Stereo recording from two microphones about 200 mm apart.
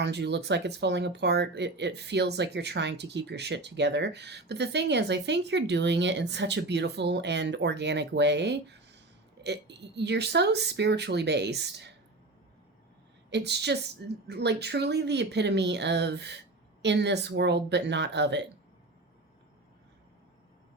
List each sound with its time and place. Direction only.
0.0 s speech: 55° right (ahead or behind)
13.3 s speech: 55° right (ahead or behind)